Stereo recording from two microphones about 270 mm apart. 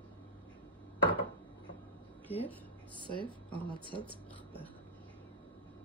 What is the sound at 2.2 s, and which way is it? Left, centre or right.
Speech, centre.